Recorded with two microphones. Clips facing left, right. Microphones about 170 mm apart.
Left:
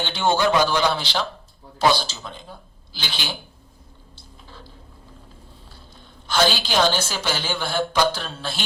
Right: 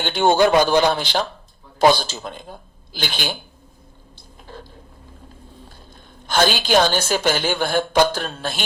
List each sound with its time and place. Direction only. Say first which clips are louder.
0.0 s a woman's voice: right 5 dB; 50° right (ahead or behind)
4.4 s a sound: right 7 dB; 50° right (ahead or behind)
6.2 s a woman's voice: right 2 dB; 50° right (ahead or behind)